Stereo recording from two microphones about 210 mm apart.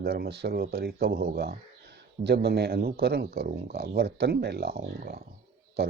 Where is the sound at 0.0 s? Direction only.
50° right (ahead or behind).